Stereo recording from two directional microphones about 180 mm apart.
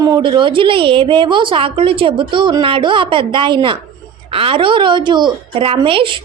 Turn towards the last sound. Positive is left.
turn(degrees=-30)  # may be behind; listen again after turning